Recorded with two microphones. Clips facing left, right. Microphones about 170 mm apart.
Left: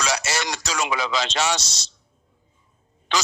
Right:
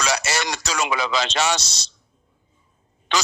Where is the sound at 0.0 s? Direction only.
60° right (ahead or behind).